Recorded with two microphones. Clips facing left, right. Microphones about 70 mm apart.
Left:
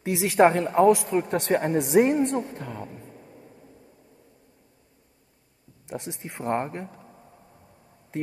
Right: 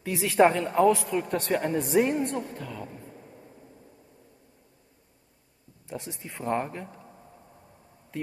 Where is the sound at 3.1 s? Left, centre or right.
Centre.